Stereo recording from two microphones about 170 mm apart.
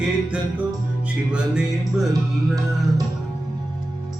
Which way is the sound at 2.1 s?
20° right (ahead or behind).